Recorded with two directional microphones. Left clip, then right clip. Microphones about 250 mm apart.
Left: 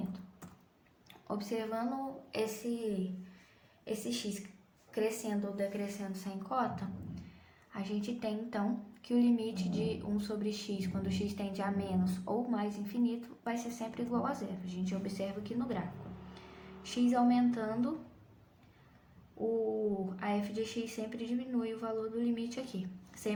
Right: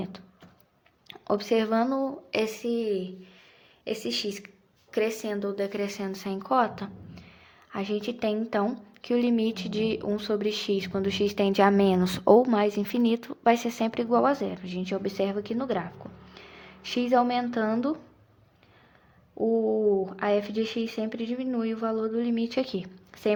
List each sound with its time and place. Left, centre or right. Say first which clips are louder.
1.0 s speech: right 13 dB; right
3.8 s a woman's voice: right 9 dB; right
16.9 s a woman's voice: right 7 dB; right
20.1 s a woman's voice: right 10 dB; right